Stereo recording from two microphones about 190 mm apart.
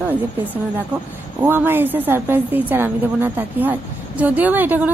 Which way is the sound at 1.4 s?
10° right (ahead or behind).